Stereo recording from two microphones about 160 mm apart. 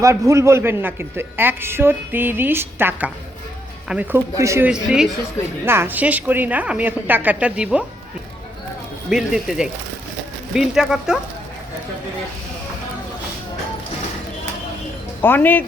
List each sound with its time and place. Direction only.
0.0 s a man's voice: 20° right (ahead or behind)
4.7 s a man's voice: 5° right (ahead or behind)
9.0 s speech: 5° right (ahead or behind)
15.2 s speech: 10° left (ahead or behind)